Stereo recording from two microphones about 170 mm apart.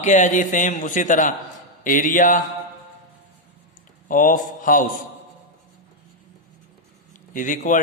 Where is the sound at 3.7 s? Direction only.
50° left (ahead or behind).